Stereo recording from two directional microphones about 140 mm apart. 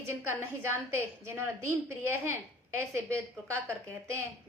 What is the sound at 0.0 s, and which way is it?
A woman's voice, 20° right (ahead or behind).